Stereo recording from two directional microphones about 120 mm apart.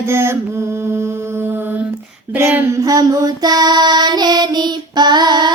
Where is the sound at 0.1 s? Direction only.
20° right (ahead or behind).